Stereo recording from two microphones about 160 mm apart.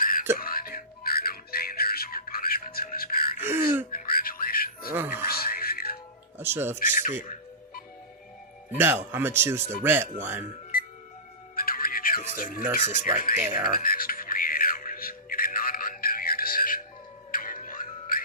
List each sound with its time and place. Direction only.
0.0 s whispering: 60° left (ahead or behind)
0.3 s music: 65° left (ahead or behind)
3.4 s gasp: 15° right (ahead or behind)
3.9 s music: 65° left (ahead or behind)
4.9 s music: 15° right (ahead or behind)
5.2 s music: 70° left (ahead or behind)
6.4 s speech: 15° right (ahead or behind)
6.7 s speech: 55° left (ahead or behind)
8.8 s speech: 15° right (ahead or behind)
11.5 s music: 65° left (ahead or behind)
12.8 s speech: 50° left (ahead or behind)
13.8 s music: 65° left (ahead or behind)